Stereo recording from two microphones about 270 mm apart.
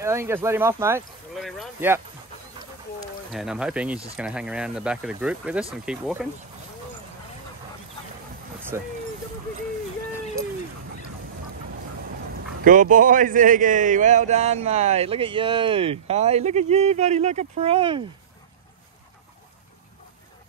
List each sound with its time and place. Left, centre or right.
0.0 s speech: centre
1.4 s a sound: centre
3.3 s speech: centre
8.7 s speech: centre
12.6 s a man's voice: right